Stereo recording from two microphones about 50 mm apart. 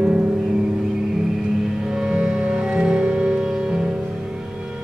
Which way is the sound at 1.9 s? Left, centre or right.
Centre.